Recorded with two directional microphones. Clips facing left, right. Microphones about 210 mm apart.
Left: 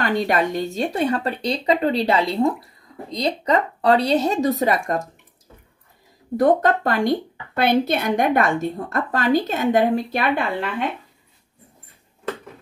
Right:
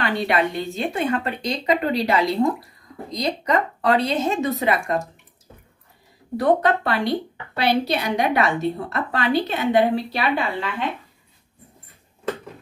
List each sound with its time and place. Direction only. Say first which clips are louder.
0.0 s speech: left 1 dB; 45° left (ahead or behind)
6.3 s a woman's voice: left 2 dB; 45° left (ahead or behind)